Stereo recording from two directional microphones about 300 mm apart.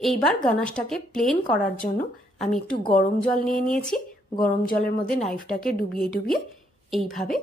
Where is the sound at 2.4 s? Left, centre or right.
Centre.